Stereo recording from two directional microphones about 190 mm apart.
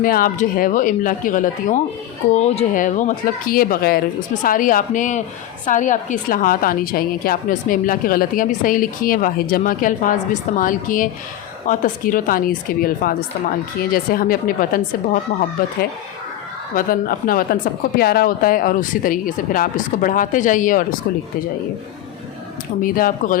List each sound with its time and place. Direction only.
0.0 s a woman's voice: 45° left (ahead or behind)
16.7 s a woman's voice: 50° left (ahead or behind)
22.8 s a woman's voice: 45° left (ahead or behind)